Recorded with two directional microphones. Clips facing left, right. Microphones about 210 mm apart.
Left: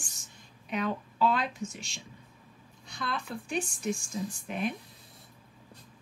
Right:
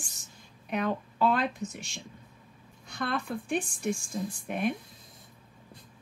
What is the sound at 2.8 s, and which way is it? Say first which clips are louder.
Speech: right 4 dB; 55° right (ahead or behind).